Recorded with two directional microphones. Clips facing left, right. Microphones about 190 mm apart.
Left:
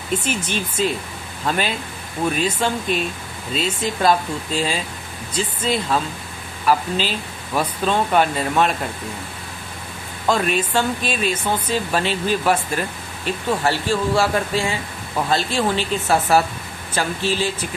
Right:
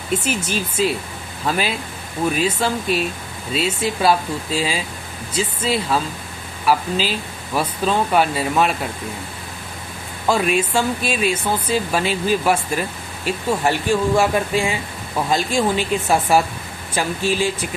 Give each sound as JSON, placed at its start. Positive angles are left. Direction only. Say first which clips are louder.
{"t": 0.3, "sound": "speech", "louder": "right 1 dB", "side_deg": -10}
{"t": 10.2, "sound": "speech", "louder": "right 1 dB", "side_deg": -10}